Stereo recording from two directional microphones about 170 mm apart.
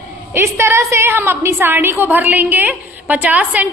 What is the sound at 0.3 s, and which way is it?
A woman's voice, 15° right (ahead or behind).